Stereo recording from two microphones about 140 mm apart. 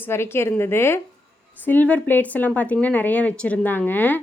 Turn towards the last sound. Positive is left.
turn(degrees=15)  # may be behind; listen again after turning